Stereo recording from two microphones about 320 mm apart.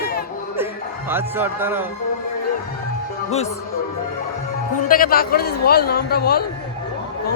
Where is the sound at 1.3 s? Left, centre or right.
Centre.